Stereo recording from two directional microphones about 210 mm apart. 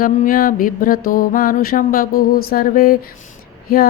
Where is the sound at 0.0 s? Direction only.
45° left (ahead or behind).